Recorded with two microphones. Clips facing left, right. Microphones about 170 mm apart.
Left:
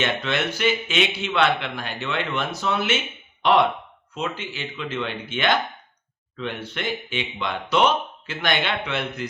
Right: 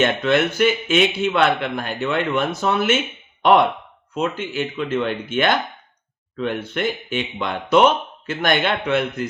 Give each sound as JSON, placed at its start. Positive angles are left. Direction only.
{"t": 0.0, "sound": "a man's voice", "side_deg": -50}
{"t": 4.1, "sound": "a man's voice", "side_deg": -50}